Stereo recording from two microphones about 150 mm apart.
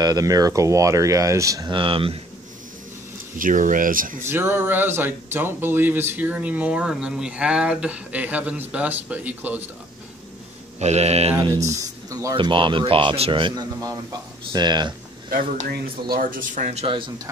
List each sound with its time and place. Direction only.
0.0 s speech: 25° right (ahead or behind)
1.8 s speech: 35° right (ahead or behind)
3.3 s speech: 60° right (ahead or behind)
4.3 s speech: 15° right (ahead or behind)
10.8 s mantra: 45° right (ahead or behind)
11.6 s speech: 20° right (ahead or behind)
15.7 s speech: 80° right; by 17.1 s 35° right (ahead or behind)